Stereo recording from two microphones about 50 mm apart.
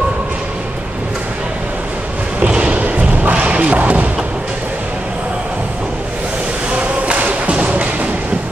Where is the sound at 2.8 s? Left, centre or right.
Right.